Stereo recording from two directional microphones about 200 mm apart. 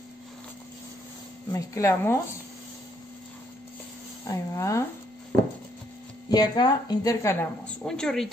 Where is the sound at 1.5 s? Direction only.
15° left (ahead or behind).